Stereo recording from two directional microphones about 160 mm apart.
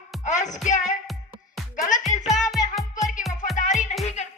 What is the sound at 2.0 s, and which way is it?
Music, centre (ahead or behind).